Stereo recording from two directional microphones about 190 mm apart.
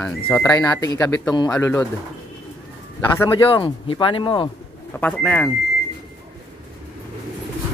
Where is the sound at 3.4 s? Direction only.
25° left (ahead or behind).